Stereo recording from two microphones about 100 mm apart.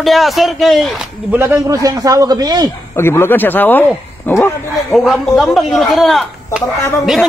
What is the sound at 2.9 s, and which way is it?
Speech, 25° left (ahead or behind).